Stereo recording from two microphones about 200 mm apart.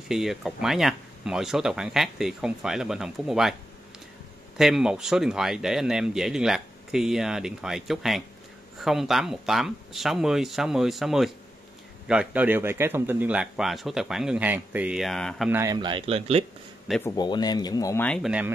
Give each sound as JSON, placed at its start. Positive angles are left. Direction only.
{"t": 0.1, "sound": "speech", "side_deg": 0}
{"t": 4.6, "sound": "speech", "side_deg": 0}
{"t": 15.5, "sound": "speech", "side_deg": -15}
{"t": 17.0, "sound": "speech", "side_deg": 20}
{"t": 18.0, "sound": "speech", "side_deg": 0}